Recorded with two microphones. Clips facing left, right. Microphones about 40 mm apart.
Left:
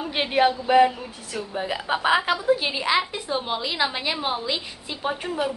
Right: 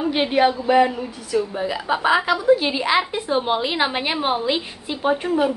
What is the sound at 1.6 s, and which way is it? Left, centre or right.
Speech, centre.